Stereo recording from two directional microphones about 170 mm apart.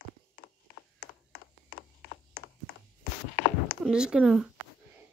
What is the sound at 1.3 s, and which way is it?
Ratchet, 65° left (ahead or behind).